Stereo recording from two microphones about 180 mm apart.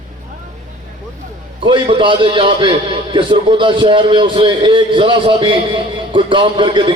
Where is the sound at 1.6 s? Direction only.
25° right (ahead or behind).